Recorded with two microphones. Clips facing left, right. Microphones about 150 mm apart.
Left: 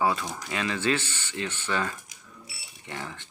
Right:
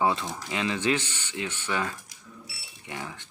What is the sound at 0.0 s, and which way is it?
Speech, 20° right (ahead or behind).